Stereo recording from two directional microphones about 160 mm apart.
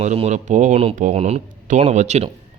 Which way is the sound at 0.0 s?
45° right (ahead or behind).